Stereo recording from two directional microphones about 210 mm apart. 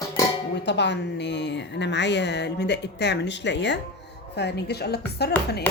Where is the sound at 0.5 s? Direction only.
55° left (ahead or behind).